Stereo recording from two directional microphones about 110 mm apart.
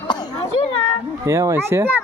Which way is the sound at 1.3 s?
25° right (ahead or behind).